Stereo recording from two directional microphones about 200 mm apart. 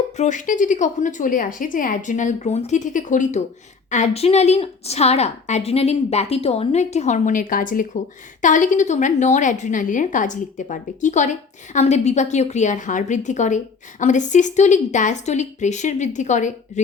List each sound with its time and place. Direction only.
0.2 s a woman's voice: 40° left (ahead or behind)